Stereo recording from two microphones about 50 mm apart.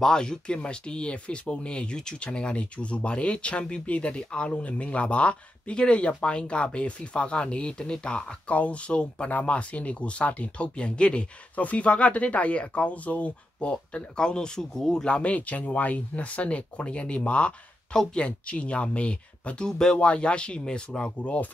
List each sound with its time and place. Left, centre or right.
0.0 s speech: centre